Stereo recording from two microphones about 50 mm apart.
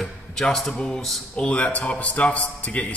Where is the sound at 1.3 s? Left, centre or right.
Left.